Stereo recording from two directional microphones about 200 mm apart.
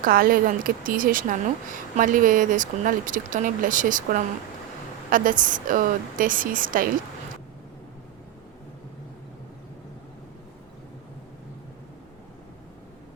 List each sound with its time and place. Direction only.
0.0 s a woman's voice: 45° right (ahead or behind)